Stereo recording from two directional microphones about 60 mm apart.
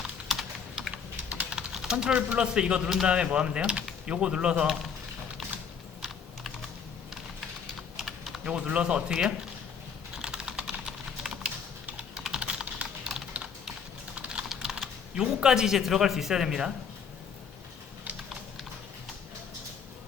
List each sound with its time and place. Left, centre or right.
0.3 s typing: centre
1.3 s typing: centre
2.1 s speech: centre
4.6 s speech: centre
7.9 s typing: centre
8.4 s speech: centre
10.2 s typing: centre
14.2 s typing: centre
14.5 s speech: centre